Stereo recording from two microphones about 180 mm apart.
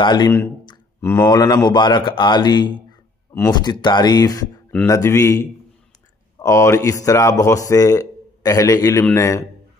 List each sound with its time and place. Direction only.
0.0 s a man's voice: 25° left (ahead or behind)